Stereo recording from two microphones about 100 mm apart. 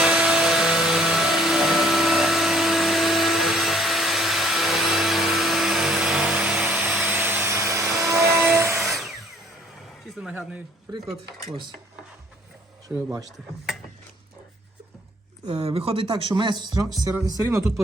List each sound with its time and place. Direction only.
0.0 s vacuum cleaner: 10° right (ahead or behind)
6.9 s vacuum cleaner: 15° right (ahead or behind)
8.0 s music: 30° right (ahead or behind)
8.8 s music: centre (ahead or behind)
10.2 s a sound: 10° right (ahead or behind)
10.9 s speech: 45° right (ahead or behind)
13.1 s speech: 35° right (ahead or behind)
15.6 s speech: 75° right (ahead or behind); by 16.9 s 50° right (ahead or behind)
17.2 s speech: 35° right (ahead or behind)